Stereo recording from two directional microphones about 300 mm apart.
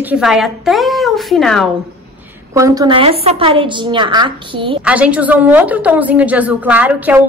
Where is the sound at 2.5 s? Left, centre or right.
Centre.